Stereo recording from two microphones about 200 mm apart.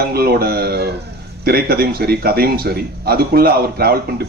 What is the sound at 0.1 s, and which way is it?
A man's voice, 50° right (ahead or behind).